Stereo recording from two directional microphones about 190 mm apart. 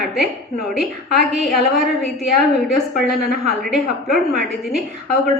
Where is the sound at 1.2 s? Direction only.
Centre (ahead or behind).